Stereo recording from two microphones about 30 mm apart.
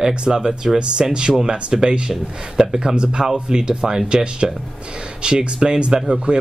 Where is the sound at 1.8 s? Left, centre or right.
Right.